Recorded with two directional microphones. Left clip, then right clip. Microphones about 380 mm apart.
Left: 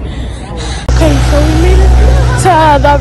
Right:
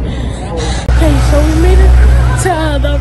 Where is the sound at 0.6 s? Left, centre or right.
Centre.